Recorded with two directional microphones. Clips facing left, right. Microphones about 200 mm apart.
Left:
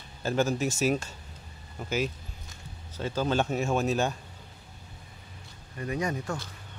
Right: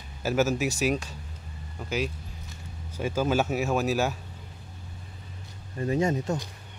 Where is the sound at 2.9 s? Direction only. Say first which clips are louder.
Right 2 dB; 10° right (ahead or behind).